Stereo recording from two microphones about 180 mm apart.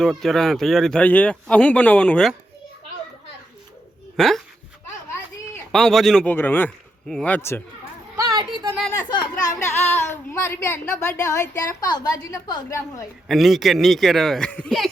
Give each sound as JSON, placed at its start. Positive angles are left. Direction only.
{"t": 0.0, "sound": "speech", "side_deg": 0}
{"t": 4.2, "sound": "speech", "side_deg": 5}
{"t": 5.7, "sound": "a woman's voice", "side_deg": 0}
{"t": 8.1, "sound": "a sound", "side_deg": -20}
{"t": 9.0, "sound": "chatter", "side_deg": 15}
{"t": 10.1, "sound": "a woman's voice", "side_deg": 15}
{"t": 13.2, "sound": "speech", "side_deg": 0}